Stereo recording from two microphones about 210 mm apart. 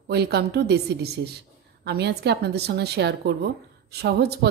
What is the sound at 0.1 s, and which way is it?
A woman's voice, 50° right (ahead or behind).